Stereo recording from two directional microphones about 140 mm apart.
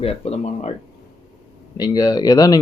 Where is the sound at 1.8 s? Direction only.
25° left (ahead or behind).